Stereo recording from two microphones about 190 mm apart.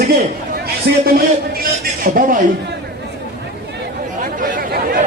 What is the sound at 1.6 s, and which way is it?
Speech, 45° right (ahead or behind).